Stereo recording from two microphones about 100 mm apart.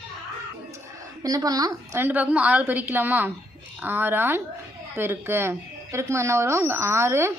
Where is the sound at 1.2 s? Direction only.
35° right (ahead or behind).